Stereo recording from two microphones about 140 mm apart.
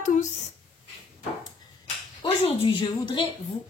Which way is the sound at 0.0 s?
60° left (ahead or behind).